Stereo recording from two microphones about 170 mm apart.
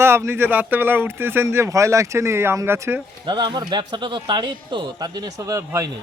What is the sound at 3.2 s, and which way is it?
Speech, 25° right (ahead or behind).